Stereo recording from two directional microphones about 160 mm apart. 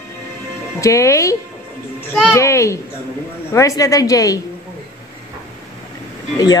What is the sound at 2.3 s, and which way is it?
A child's voice, 20° left (ahead or behind).